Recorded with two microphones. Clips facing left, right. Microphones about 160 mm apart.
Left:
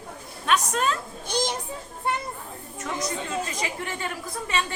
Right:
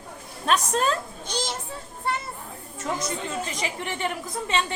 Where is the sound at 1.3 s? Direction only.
15° left (ahead or behind).